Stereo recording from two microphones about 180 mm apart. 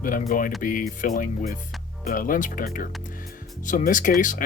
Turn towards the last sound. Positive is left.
turn(degrees=45)  # may be behind; listen again after turning